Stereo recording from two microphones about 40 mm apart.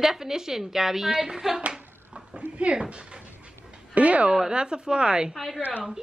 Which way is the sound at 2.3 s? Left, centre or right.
Right.